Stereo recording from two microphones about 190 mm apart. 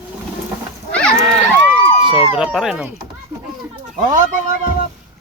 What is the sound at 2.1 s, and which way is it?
Speech, 30° left (ahead or behind).